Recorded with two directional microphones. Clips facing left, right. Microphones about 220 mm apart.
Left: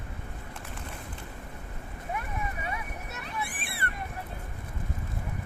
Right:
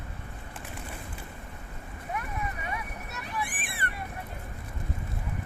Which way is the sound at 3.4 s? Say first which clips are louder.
Even; 15° right (ahead or behind).